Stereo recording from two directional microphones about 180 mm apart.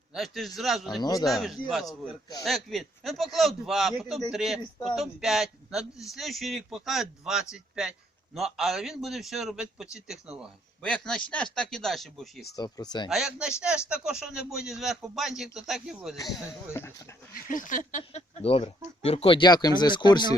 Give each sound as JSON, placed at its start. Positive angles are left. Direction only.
{"t": 0.1, "sound": "a man's voice", "side_deg": 0}
{"t": 12.5, "sound": "speech", "side_deg": 20}
{"t": 13.1, "sound": "a man's voice", "side_deg": -5}
{"t": 16.7, "sound": "speech", "side_deg": 15}
{"t": 17.5, "sound": "speech", "side_deg": 45}